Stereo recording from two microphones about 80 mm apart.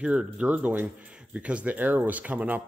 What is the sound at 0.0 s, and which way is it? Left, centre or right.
A man's voice, centre.